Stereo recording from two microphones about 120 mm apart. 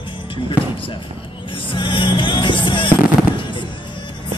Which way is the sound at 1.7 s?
45° left (ahead or behind).